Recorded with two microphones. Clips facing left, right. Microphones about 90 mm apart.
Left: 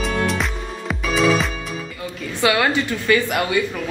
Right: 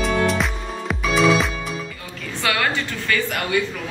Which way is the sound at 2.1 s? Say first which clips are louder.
Left 4 dB; 15° left (ahead or behind).